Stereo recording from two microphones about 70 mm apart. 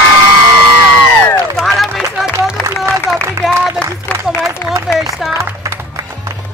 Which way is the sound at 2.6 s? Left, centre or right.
Left.